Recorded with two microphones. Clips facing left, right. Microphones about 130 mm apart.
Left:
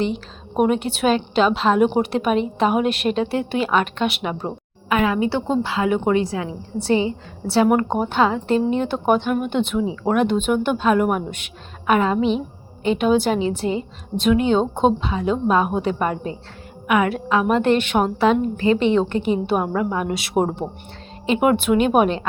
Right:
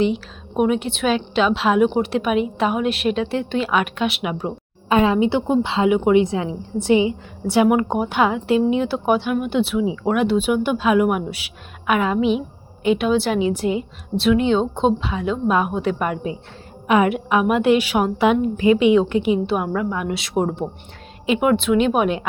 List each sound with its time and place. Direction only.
0.0 s a woman's voice: centre (ahead or behind)
4.9 s a woman's voice: 25° right (ahead or behind)
5.9 s a woman's voice: 10° right (ahead or behind)
6.2 s a woman's voice: 25° right (ahead or behind)
16.8 s a woman's voice: 25° right (ahead or behind); by 20.2 s centre (ahead or behind)
21.5 s a woman's voice: 5° left (ahead or behind)